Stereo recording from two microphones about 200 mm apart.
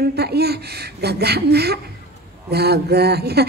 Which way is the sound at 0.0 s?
55° right (ahead or behind).